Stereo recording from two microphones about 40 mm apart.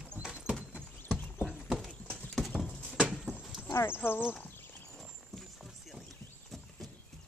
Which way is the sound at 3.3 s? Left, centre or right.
Left.